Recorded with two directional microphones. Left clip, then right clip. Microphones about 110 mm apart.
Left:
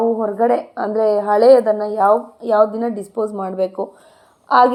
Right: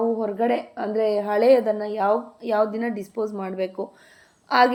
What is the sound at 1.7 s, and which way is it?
Speech, 20° right (ahead or behind).